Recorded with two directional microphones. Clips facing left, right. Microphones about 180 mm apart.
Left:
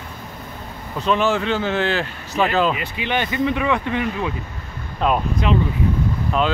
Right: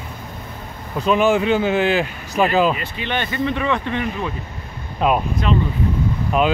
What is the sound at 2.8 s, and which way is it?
Speech, 10° left (ahead or behind).